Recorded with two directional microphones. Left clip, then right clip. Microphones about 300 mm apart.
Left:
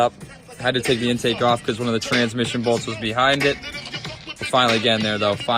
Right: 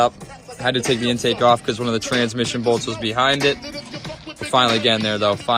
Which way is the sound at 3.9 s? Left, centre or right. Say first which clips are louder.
Left 1 dB; centre.